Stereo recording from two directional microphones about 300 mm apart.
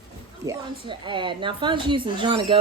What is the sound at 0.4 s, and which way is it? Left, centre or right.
A woman's voice, centre.